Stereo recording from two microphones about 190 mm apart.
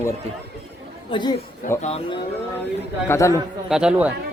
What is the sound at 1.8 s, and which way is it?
Speech, 30° left (ahead or behind).